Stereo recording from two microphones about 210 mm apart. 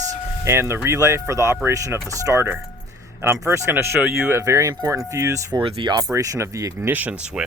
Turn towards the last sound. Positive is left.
turn(degrees=-5)  # may be behind; listen again after turning